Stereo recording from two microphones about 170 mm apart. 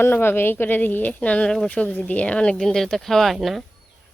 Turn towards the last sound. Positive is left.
turn(degrees=0)  # may be behind; listen again after turning